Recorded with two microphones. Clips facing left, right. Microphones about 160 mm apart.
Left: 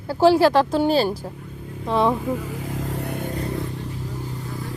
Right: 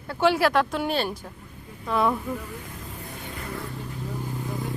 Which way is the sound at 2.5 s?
90° left.